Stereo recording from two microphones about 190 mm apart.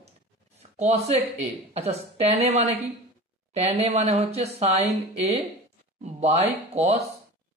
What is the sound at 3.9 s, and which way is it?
A woman's voice, 35° right (ahead or behind).